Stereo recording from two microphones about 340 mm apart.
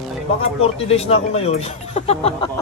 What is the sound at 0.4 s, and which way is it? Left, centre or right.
Speech, centre.